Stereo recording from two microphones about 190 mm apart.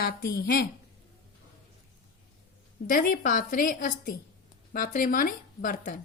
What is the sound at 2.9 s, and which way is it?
A woman's voice, 45° left (ahead or behind).